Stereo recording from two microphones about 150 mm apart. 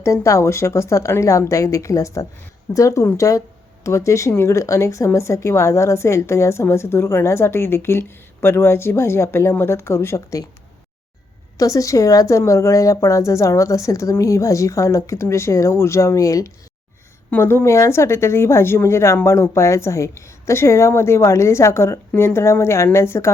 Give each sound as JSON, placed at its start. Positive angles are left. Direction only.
{"t": 0.0, "sound": "a woman's voice", "side_deg": 20}
{"t": 11.5, "sound": "a woman's voice", "side_deg": 20}